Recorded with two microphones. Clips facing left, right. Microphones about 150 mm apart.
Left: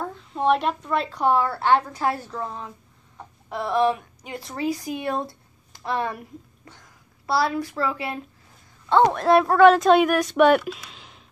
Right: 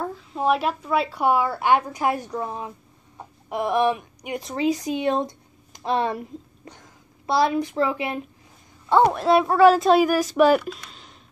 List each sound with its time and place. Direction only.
0.3 s a woman's voice: 5° right (ahead or behind); by 8.2 s 20° right (ahead or behind)
8.8 s a woman's voice: 10° right (ahead or behind)